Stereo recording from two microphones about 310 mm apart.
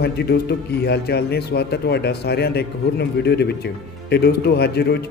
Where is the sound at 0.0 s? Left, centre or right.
Left.